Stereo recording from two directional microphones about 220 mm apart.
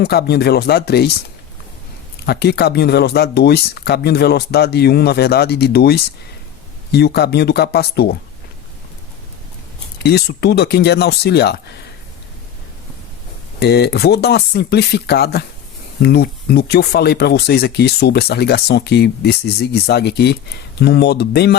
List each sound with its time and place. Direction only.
0.0 s speech: 50° left (ahead or behind)
2.2 s speech: 45° left (ahead or behind)
10.0 s speech: 45° left (ahead or behind)
13.6 s speech: 45° left (ahead or behind)